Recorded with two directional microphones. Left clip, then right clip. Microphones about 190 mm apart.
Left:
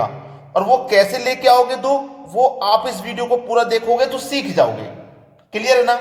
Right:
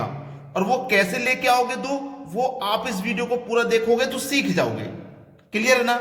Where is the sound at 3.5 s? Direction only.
15° right (ahead or behind).